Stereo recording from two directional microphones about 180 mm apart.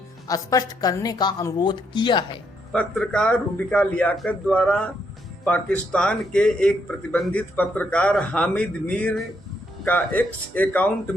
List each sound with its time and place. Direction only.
0.3 s a woman's voice: 20° left (ahead or behind)
2.7 s a man's voice: 5° left (ahead or behind)